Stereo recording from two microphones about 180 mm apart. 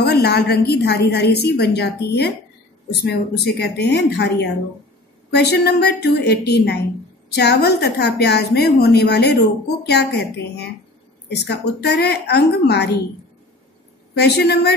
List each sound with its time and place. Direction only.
0.0 s a woman's voice: 65° left (ahead or behind)
14.1 s a woman's voice: 65° left (ahead or behind)